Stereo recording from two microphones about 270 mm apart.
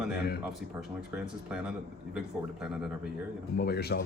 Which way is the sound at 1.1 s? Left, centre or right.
Centre.